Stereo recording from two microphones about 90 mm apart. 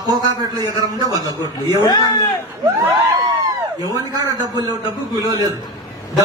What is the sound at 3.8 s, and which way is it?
A man's voice, 40° right (ahead or behind).